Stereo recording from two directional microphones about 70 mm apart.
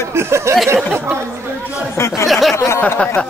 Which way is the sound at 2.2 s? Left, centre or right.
Centre.